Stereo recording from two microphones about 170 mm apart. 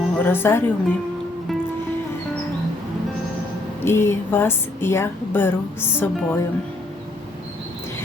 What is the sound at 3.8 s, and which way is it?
Speech, 15° left (ahead or behind).